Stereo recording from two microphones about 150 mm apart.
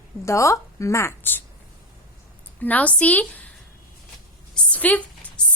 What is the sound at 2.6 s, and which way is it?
Speech, 10° left (ahead or behind).